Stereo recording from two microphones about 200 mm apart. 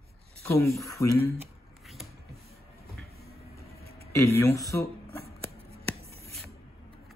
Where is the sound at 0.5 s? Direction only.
10° left (ahead or behind).